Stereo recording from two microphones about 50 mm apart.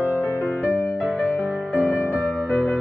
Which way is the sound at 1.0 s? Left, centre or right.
Right.